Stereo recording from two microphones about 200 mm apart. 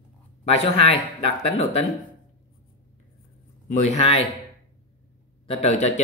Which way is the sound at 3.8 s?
30° left (ahead or behind).